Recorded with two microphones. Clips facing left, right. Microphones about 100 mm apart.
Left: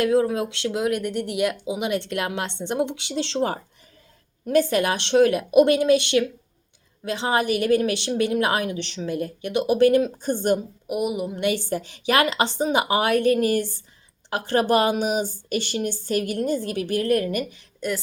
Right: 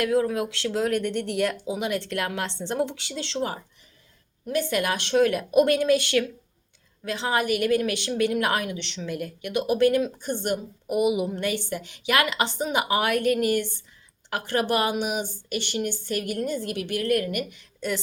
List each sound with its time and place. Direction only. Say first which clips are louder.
0.0 s a woman's voice: left 3 dB; 25° left (ahead or behind); by 4.7 s 40° left (ahead or behind)
4.7 s speech: left 3 dB; 25° left (ahead or behind)
10.8 s a sound: right 3 dB; centre (ahead or behind)
11.5 s a woman's voice: left 4 dB; 30° left (ahead or behind)